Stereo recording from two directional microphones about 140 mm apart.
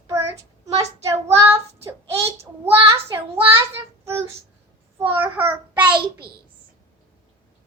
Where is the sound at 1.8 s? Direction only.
20° right (ahead or behind).